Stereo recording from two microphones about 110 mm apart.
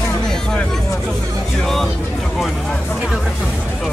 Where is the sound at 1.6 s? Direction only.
5° left (ahead or behind).